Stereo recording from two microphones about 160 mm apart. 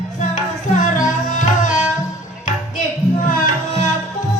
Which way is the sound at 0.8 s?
50° left (ahead or behind).